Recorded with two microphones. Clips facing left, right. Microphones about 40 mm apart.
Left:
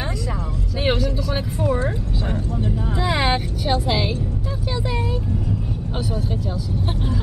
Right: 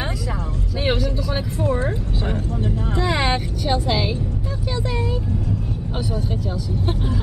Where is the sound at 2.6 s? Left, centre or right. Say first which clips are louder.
Right 1 dB; centre.